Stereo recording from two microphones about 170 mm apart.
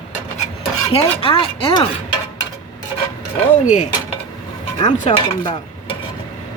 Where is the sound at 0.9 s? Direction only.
30° left (ahead or behind).